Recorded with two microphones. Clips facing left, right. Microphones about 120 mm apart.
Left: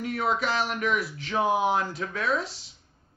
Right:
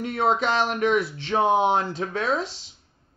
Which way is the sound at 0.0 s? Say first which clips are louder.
Right 4 dB; 30° right (ahead or behind).